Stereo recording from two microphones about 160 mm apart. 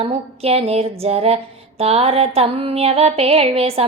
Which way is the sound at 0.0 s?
40° right (ahead or behind).